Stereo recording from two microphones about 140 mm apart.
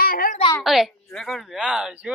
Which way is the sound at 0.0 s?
90° left.